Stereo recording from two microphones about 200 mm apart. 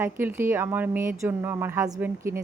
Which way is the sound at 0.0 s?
10° right (ahead or behind).